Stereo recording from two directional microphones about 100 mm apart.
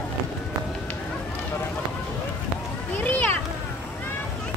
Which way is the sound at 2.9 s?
15° left (ahead or behind).